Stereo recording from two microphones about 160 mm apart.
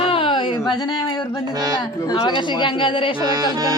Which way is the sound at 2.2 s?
30° left (ahead or behind).